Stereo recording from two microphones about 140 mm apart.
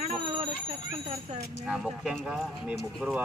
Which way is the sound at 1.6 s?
5° right (ahead or behind).